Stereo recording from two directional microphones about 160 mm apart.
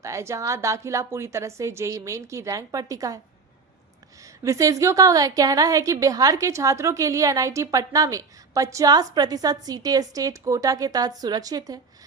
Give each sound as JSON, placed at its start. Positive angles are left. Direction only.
{"t": 0.0, "sound": "a woman's voice", "side_deg": -20}
{"t": 4.4, "sound": "a woman's voice", "side_deg": -20}